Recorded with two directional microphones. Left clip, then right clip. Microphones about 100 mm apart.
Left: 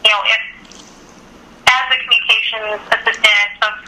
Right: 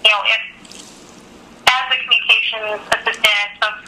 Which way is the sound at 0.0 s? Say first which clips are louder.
Left 1 dB; 25° left (ahead or behind).